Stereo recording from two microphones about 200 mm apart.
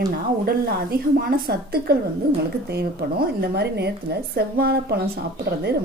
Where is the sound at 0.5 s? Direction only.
50° right (ahead or behind).